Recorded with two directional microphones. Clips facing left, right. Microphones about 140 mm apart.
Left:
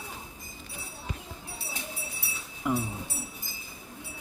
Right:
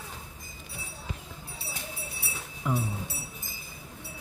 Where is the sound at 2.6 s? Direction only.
5° left (ahead or behind).